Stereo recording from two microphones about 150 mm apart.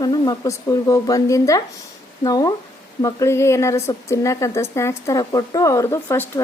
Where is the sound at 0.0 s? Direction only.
25° left (ahead or behind).